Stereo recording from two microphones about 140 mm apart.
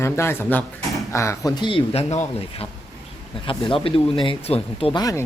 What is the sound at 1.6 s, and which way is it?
Speech, 40° left (ahead or behind).